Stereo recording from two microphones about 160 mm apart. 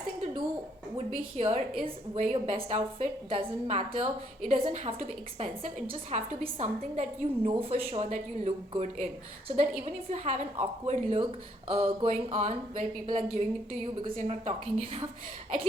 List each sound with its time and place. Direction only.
1.1 s a woman's voice: 45° right (ahead or behind)